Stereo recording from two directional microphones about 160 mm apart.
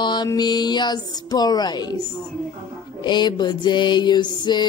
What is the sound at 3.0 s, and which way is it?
A woman's voice, 25° left (ahead or behind).